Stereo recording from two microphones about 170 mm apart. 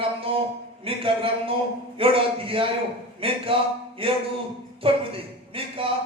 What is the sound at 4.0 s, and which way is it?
A man's voice, 30° right (ahead or behind).